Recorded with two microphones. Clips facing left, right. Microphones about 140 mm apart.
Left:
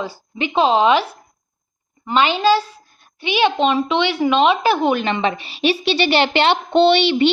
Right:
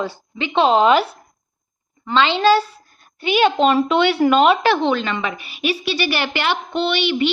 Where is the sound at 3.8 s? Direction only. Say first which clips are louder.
Right 2 dB; centre (ahead or behind).